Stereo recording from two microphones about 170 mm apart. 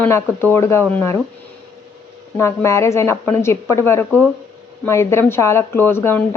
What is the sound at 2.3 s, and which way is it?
A woman's voice, 15° left (ahead or behind).